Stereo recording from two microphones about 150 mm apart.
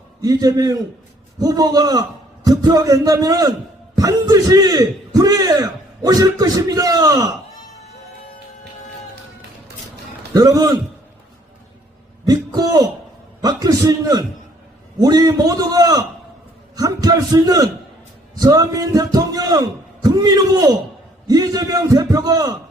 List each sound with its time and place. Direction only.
0.2 s a man's voice: 25° right (ahead or behind)
10.3 s a man's voice: 25° right (ahead or behind)
12.2 s a man's voice: 25° right (ahead or behind)
16.7 s a sound: 25° right (ahead or behind)
18.3 s a man's voice: 25° right (ahead or behind)